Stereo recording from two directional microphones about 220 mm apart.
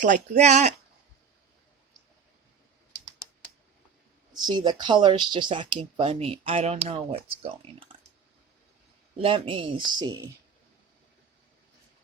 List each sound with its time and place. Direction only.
0.0 s speech: 35° right (ahead or behind)
4.4 s speech: 20° right (ahead or behind)
9.1 s speech: 25° right (ahead or behind)